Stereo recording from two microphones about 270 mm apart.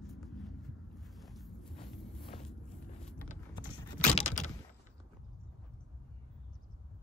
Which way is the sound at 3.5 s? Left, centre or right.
Centre.